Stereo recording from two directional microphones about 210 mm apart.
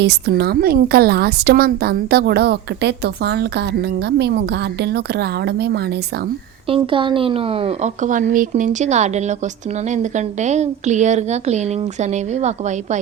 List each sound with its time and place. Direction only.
0.0 s a woman's voice: 50° right (ahead or behind)
6.7 s a woman's voice: 25° right (ahead or behind)